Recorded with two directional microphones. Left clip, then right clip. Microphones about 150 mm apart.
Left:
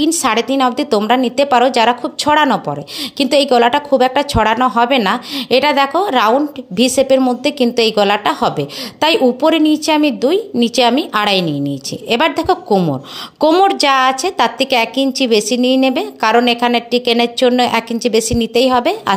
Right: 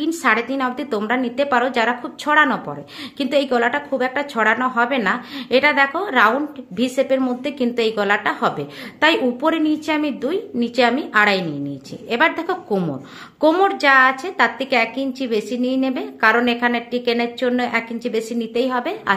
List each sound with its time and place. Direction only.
0.0 s a woman's voice: 45° left (ahead or behind)